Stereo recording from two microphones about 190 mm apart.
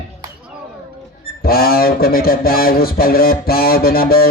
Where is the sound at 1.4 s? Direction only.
55° left (ahead or behind).